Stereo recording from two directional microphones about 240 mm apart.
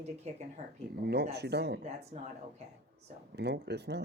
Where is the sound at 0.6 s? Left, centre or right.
Right.